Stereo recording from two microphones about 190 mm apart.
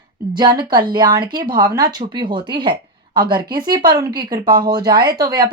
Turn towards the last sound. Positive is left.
turn(degrees=-20)  # may be behind; listen again after turning